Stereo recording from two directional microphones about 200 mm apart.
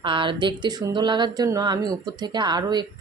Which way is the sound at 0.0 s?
25° right (ahead or behind).